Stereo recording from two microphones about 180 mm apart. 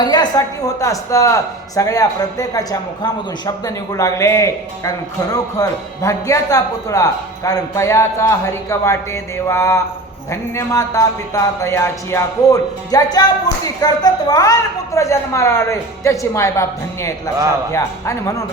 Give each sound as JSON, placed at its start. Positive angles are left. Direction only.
{"t": 0.0, "sound": "a man's voice", "side_deg": 25}